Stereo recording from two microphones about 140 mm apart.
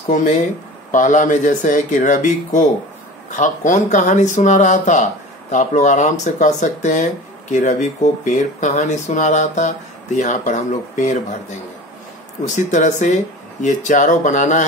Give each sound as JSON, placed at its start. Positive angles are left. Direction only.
{"t": 0.1, "sound": "speech", "side_deg": 75}
{"t": 12.4, "sound": "speech", "side_deg": 60}